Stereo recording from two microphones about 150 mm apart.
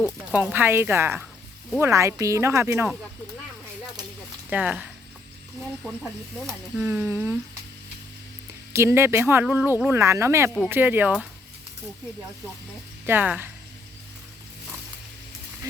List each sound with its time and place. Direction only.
0.3 s speech: 10° right (ahead or behind)
4.4 s speech: 10° right (ahead or behind)
6.7 s speech: 10° right (ahead or behind)
8.7 s speech: 20° right (ahead or behind)
13.1 s speech: 10° right (ahead or behind)